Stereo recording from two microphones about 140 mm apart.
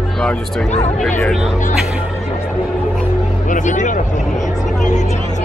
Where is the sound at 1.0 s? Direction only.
10° left (ahead or behind).